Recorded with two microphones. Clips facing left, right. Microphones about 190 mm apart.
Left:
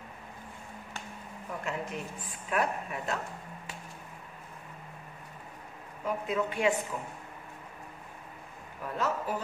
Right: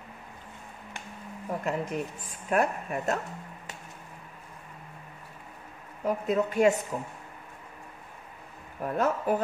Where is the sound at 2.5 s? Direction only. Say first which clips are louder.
Right 4 dB; 45° right (ahead or behind).